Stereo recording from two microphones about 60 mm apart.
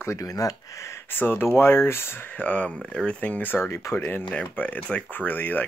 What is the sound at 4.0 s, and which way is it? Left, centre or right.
Speech, left.